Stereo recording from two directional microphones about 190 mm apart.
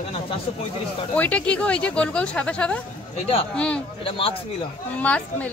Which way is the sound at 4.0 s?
30° left (ahead or behind).